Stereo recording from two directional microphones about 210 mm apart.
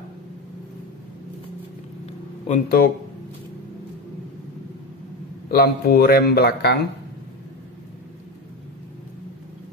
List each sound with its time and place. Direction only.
2.4 s speech: 40° left (ahead or behind)
5.5 s speech: 45° left (ahead or behind)